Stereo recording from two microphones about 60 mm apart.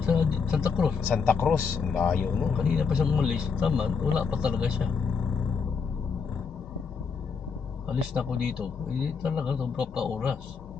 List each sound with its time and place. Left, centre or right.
0.0 s vehicle: centre
1.1 s speech: centre
1.8 s speech: centre
2.5 s speech: centre
8.1 s speech: centre